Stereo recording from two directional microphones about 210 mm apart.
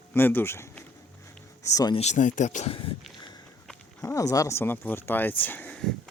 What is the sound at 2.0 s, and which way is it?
Speech, 35° left (ahead or behind).